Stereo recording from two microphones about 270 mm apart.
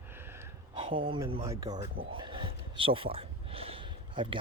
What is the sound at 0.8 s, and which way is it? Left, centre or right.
Speech, centre.